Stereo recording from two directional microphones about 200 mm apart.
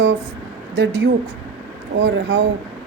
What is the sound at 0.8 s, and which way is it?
A woman's voice, 60° right (ahead or behind).